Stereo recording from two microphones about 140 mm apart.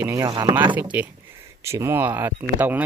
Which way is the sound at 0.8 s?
10° right (ahead or behind).